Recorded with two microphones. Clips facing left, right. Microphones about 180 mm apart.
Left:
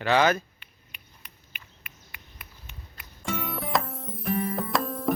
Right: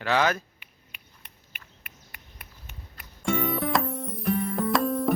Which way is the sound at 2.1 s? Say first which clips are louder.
Even; 45° right (ahead or behind).